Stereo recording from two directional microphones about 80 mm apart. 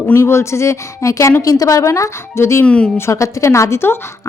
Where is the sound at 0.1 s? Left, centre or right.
Left.